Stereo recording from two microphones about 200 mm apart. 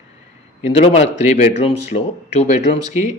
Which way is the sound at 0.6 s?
30° left (ahead or behind).